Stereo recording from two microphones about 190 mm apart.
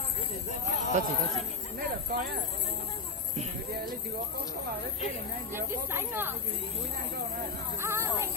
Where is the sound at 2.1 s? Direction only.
50° right (ahead or behind).